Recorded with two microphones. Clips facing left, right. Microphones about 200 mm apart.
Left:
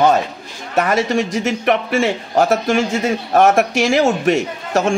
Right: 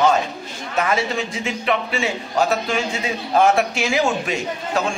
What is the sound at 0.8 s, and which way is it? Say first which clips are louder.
A man's voice: left 5 dB; 45° left (ahead or behind).